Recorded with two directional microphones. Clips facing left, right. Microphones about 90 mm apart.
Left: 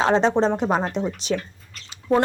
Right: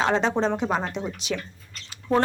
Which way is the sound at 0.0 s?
35° left (ahead or behind).